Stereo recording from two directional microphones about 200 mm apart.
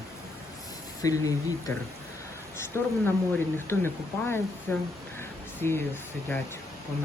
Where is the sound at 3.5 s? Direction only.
10° left (ahead or behind).